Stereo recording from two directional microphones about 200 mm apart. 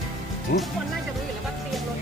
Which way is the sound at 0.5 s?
55° left (ahead or behind).